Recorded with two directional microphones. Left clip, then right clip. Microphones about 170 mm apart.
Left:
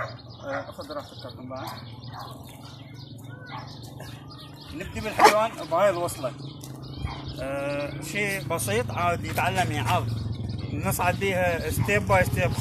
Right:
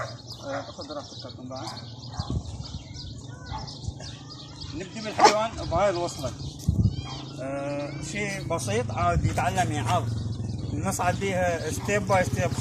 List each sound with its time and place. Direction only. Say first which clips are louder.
0.0 s a sound: left 1 dB; 5° right (ahead or behind)
4.7 s speech: left 2 dB; 20° left (ahead or behind)
5.1 s speech: left 1 dB; centre (ahead or behind)
5.4 s speech: left 2 dB; 25° left (ahead or behind)
7.3 s speech: left 2 dB; 10° left (ahead or behind)